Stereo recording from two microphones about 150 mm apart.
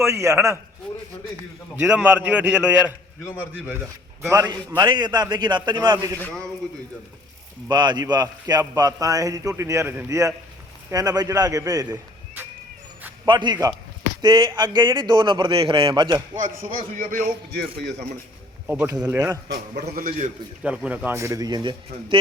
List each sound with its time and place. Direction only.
0.0 s a man's voice: 20° right (ahead or behind)
2.0 s a man's voice: 10° right (ahead or behind)
4.3 s a man's voice: 20° right (ahead or behind)
6.1 s a man's voice: 10° left (ahead or behind)
7.7 s a man's voice: 30° right (ahead or behind)
13.2 s a man's voice: 30° right (ahead or behind)
16.9 s a man's voice: 60° right (ahead or behind)
18.9 s a man's voice: 25° right (ahead or behind)
19.8 s a man's voice: 65° right (ahead or behind)
20.7 s a man's voice: 10° right (ahead or behind); by 22.2 s 35° right (ahead or behind)